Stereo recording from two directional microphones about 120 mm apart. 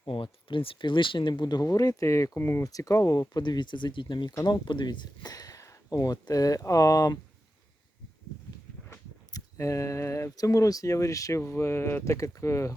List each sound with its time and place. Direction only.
0.0 s speech: 45° left (ahead or behind); by 7.2 s 30° left (ahead or behind)
8.9 s speech: 25° left (ahead or behind)